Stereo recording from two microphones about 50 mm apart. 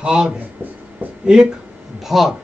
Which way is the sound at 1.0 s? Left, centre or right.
Right.